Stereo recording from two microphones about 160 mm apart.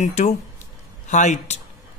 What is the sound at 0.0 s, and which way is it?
Speech, 45° left (ahead or behind).